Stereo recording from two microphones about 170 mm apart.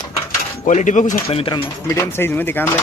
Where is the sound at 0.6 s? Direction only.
45° left (ahead or behind).